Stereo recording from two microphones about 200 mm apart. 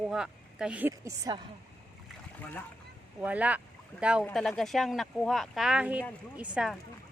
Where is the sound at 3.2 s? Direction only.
5° right (ahead or behind).